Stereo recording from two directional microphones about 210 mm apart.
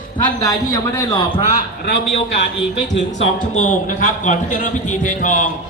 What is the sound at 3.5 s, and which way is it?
A man's voice, 35° left (ahead or behind).